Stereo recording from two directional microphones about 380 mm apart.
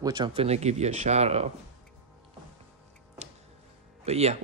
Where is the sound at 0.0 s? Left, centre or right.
Centre.